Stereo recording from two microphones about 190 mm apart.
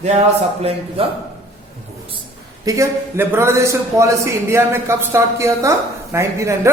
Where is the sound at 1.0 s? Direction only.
30° right (ahead or behind).